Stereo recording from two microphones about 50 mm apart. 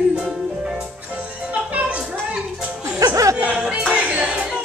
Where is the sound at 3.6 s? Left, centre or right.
Right.